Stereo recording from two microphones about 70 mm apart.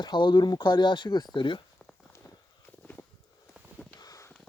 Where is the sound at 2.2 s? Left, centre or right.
Left.